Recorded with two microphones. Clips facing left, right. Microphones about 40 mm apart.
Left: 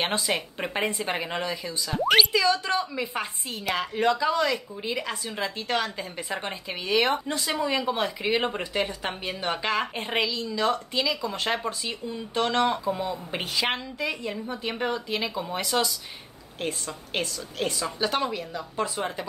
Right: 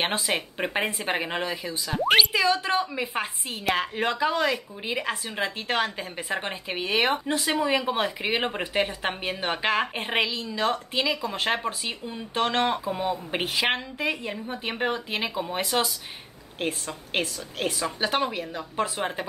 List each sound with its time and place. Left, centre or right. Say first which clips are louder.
0.3 s a woman's voice: right 1 dB; centre
8.7 s a woman's voice: right 2 dB; right